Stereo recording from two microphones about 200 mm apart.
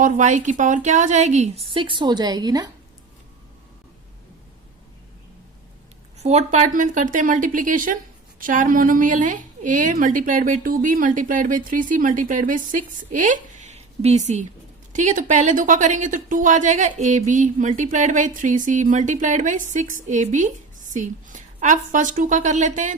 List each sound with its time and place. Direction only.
0.0 s a woman's voice: 40° right (ahead or behind); by 2.6 s 20° right (ahead or behind)
6.1 s a woman's voice: 35° right (ahead or behind)